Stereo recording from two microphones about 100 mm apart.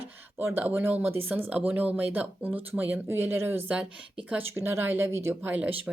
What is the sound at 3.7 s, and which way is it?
Speech, 10° right (ahead or behind).